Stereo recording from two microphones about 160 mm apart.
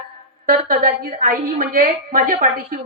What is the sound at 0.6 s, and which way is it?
A woman's voice, 65° right (ahead or behind).